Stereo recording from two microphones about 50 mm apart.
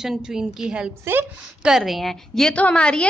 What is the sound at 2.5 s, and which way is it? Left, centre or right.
Speech, left.